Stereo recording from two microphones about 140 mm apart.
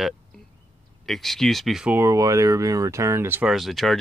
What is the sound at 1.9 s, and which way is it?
Speech, 20° right (ahead or behind).